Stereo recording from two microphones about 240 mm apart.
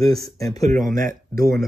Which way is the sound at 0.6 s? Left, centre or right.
Right.